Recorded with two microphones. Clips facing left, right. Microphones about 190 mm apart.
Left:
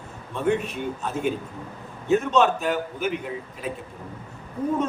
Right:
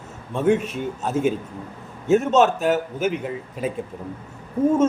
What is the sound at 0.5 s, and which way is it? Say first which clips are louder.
A man's voice: right 4 dB; 45° right (ahead or behind).